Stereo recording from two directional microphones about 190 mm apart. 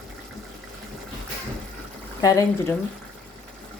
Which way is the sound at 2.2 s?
15° left (ahead or behind).